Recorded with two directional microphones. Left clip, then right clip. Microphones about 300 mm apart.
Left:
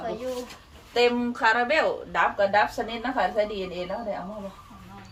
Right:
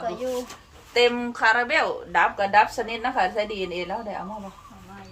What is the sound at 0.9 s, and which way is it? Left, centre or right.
A woman's voice, centre.